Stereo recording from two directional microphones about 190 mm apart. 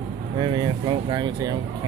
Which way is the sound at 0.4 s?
25° right (ahead or behind).